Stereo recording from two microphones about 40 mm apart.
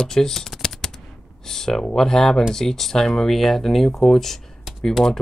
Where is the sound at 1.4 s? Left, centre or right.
Centre.